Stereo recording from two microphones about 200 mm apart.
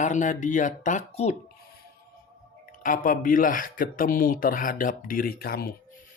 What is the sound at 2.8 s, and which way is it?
Speech, 40° left (ahead or behind).